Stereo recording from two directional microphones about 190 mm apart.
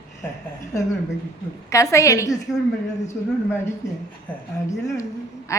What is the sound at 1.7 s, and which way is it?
Speech, 15° left (ahead or behind).